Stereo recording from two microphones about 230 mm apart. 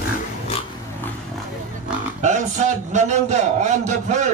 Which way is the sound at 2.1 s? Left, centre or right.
Right.